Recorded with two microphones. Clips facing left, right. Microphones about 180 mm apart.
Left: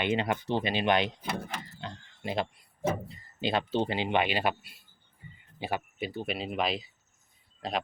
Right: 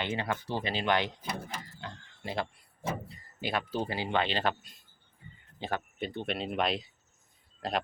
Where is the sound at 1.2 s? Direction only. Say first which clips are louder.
Left 3 dB; 65° left (ahead or behind).